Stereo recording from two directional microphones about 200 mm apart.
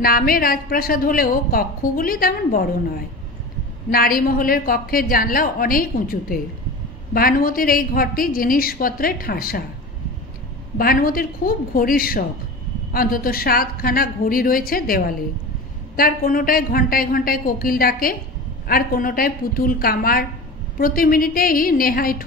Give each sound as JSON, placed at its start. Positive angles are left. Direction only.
{"t": 0.0, "sound": "a woman's voice", "side_deg": 45}
{"t": 10.8, "sound": "a woman's voice", "side_deg": 45}